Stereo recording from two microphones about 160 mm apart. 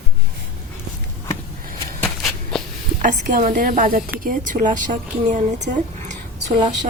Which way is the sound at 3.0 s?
55° right (ahead or behind).